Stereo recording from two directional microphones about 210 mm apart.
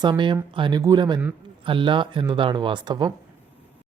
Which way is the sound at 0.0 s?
20° right (ahead or behind).